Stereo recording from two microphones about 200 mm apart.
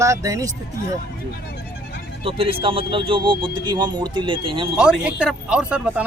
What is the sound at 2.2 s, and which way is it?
Speech, 30° right (ahead or behind).